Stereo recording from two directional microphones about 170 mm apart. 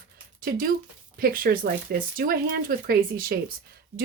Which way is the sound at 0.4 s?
55° right (ahead or behind).